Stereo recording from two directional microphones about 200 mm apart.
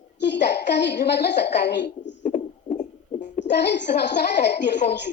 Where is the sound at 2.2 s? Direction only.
35° left (ahead or behind).